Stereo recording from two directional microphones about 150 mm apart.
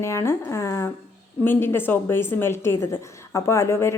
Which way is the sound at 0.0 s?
20° left (ahead or behind).